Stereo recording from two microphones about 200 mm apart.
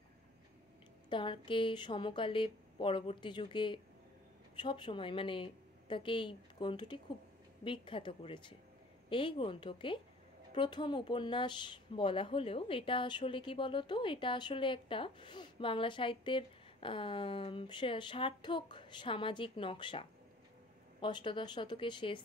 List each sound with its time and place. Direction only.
1.1 s speech: 25° left (ahead or behind)